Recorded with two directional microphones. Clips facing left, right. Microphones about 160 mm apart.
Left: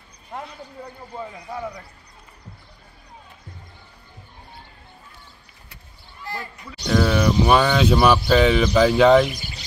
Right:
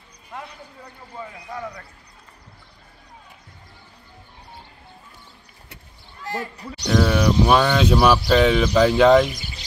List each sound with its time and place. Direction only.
1.5 s speech: 25° left (ahead or behind)
6.5 s speech: 35° right (ahead or behind)
6.9 s speech: centre (ahead or behind)